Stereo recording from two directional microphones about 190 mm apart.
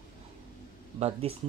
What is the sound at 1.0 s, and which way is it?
Speech, 30° right (ahead or behind).